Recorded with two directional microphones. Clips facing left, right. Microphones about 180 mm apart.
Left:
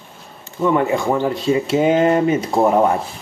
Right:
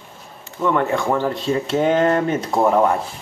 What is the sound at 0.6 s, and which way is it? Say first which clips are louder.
A man's voice: left 2 dB; 10° left (ahead or behind).